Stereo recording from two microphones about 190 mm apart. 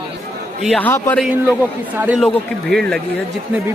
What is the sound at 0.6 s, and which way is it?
Speech, 5° left (ahead or behind).